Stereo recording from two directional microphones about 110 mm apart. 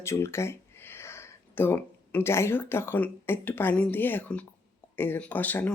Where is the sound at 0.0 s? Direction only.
25° left (ahead or behind).